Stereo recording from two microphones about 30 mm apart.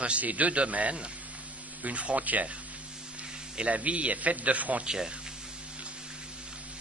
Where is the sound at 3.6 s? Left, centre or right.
Right.